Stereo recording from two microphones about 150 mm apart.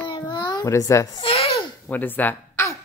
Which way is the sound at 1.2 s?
40° left (ahead or behind).